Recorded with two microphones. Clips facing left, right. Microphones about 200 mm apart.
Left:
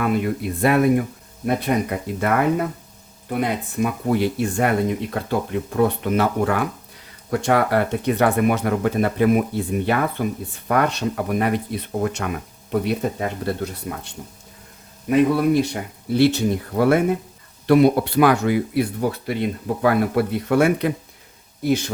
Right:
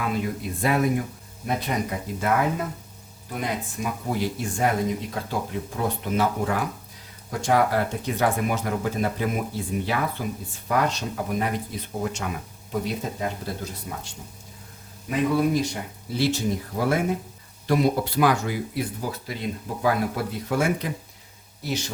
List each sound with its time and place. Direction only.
0.0 s speech: 60° left (ahead or behind)
3.8 s speech: 60° left (ahead or behind)
15.5 s speech: 60° left (ahead or behind)
21.6 s speech: 55° left (ahead or behind)